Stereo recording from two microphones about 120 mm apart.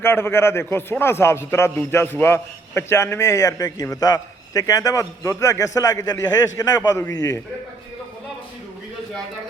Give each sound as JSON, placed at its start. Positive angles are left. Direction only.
{"t": 0.0, "sound": "a man's voice", "side_deg": 20}